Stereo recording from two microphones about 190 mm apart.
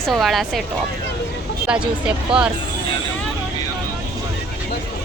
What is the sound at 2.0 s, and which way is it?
Speech, 5° right (ahead or behind).